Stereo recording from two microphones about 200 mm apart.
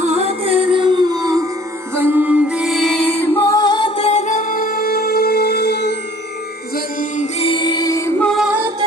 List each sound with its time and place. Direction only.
0.0 s music: 35° right (ahead or behind); by 6.0 s 55° left (ahead or behind)
6.7 s music: 40° left (ahead or behind); by 8.3 s 15° left (ahead or behind)